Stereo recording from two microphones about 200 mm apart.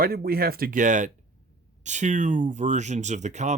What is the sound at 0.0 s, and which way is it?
Speech, 50° right (ahead or behind).